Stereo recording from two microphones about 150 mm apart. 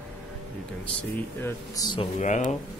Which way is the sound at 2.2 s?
55° left (ahead or behind).